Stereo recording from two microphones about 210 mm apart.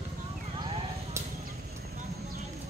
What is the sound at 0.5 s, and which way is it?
Vehicle, 20° right (ahead or behind).